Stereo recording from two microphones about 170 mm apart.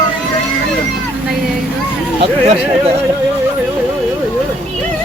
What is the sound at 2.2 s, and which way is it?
Speech, 35° right (ahead or behind).